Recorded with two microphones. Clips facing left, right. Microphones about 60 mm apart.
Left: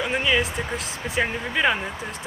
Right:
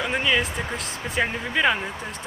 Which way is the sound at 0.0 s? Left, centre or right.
Centre.